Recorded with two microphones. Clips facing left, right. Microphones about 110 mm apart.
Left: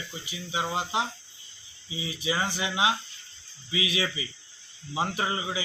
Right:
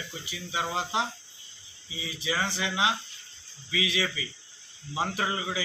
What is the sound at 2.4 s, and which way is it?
Speech, 5° left (ahead or behind).